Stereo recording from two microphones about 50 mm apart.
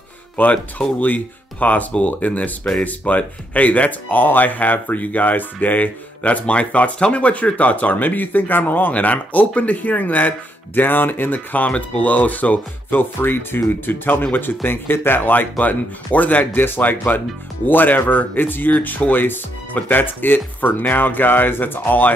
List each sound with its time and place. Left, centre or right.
0.4 s speech: left
13.2 s speech: left